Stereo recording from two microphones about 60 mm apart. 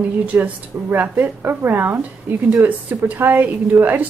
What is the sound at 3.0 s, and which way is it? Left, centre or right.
A woman's voice, right.